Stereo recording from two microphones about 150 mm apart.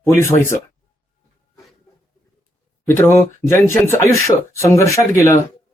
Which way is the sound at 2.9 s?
15° left (ahead or behind).